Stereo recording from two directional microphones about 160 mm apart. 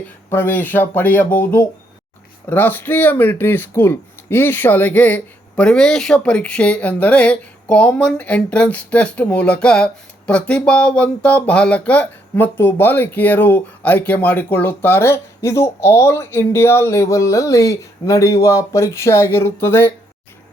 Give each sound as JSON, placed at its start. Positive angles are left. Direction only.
{"t": 0.3, "sound": "speech", "side_deg": 15}